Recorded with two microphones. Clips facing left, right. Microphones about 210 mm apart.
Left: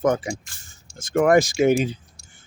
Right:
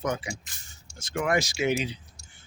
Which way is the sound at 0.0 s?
50° left (ahead or behind).